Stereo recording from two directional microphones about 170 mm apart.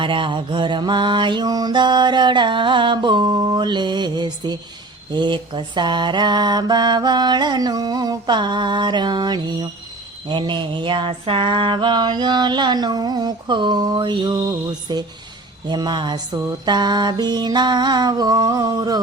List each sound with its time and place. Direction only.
0.0 s mantra: 30° right (ahead or behind)